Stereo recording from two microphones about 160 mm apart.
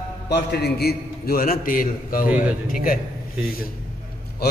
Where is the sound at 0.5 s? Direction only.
85° left; by 3.0 s 60° left (ahead or behind).